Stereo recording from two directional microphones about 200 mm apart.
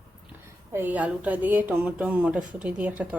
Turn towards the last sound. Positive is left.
turn(degrees=-5)  # may be behind; listen again after turning